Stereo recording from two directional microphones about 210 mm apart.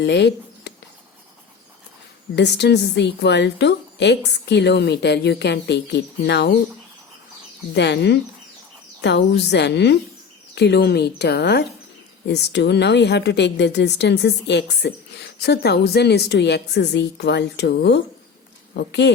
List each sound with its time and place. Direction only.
0.0 s speech: 55° left (ahead or behind)
2.3 s a woman's voice: 55° left (ahead or behind)
7.7 s a woman's voice: 55° left (ahead or behind)